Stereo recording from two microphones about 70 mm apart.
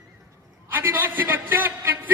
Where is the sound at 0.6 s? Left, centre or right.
Right.